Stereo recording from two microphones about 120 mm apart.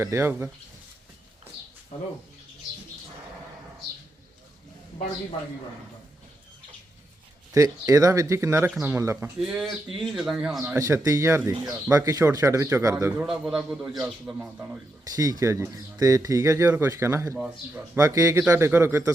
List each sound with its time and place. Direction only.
0.0 s speech: 20° right (ahead or behind)
7.5 s speech: 30° right (ahead or behind)
9.4 s a man's voice: centre (ahead or behind)
10.8 s speech: 25° right (ahead or behind)
13.2 s a man's voice: 5° right (ahead or behind)
15.0 s speech: 30° right (ahead or behind)
17.3 s speech: 10° right (ahead or behind)
17.9 s speech: 25° right (ahead or behind)